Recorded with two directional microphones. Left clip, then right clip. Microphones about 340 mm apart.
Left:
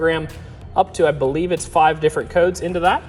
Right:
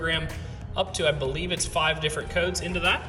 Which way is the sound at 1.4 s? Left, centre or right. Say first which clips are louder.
Left 10 dB; centre.